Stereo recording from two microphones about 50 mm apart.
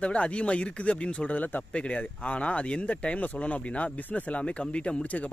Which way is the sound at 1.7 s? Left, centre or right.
Left.